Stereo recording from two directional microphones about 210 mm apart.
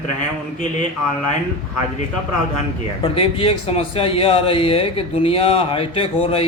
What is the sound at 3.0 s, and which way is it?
A man's voice, 25° left (ahead or behind).